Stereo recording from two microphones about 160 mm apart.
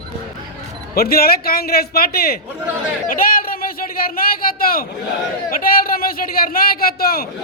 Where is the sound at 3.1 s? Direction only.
65° left (ahead or behind).